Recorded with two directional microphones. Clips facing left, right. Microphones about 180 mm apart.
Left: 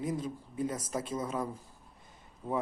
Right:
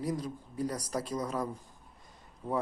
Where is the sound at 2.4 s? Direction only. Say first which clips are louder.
Right 1 dB; 10° left (ahead or behind).